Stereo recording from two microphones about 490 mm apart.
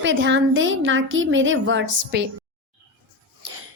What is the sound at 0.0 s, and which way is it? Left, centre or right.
A woman's voice, right.